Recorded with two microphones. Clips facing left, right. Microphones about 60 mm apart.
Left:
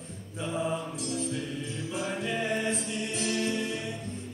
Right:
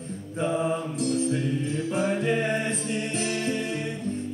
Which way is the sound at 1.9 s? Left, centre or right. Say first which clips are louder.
Right 6 dB; right.